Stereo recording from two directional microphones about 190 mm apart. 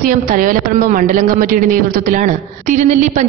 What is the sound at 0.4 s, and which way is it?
A man's voice, 45° right (ahead or behind).